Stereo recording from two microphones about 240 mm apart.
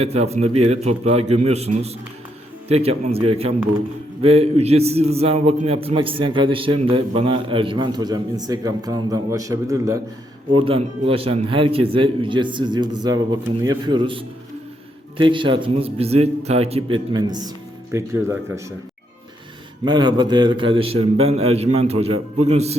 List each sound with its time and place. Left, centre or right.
0.0 s a man's voice: right
19.8 s a man's voice: centre